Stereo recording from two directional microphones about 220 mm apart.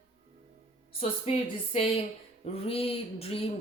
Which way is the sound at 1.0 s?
25° left (ahead or behind).